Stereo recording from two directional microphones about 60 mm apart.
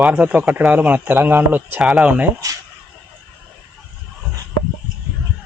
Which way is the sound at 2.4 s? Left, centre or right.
Right.